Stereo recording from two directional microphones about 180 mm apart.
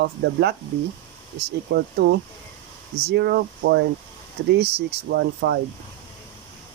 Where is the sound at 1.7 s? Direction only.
60° right (ahead or behind).